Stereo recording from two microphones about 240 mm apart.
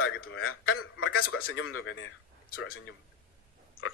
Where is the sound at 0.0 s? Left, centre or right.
Left.